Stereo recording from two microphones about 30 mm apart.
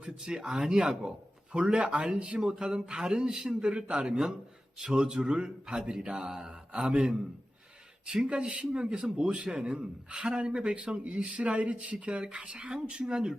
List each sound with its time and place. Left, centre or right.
0.0 s a man's voice: right
1.5 s a man's voice: right
2.4 s a man's voice: right
3.7 s a man's voice: right
4.0 s a man's voice: right
8.0 s speech: right
8.3 s a man's voice: right